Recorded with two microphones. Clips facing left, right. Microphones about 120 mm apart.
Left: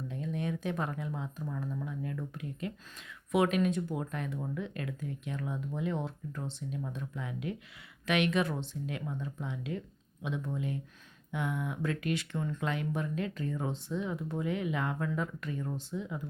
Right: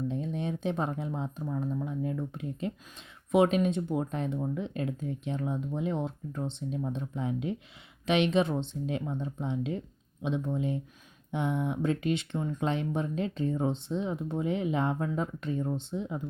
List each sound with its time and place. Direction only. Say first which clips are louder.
0.1 s speech: right 3 dB; 25° right (ahead or behind)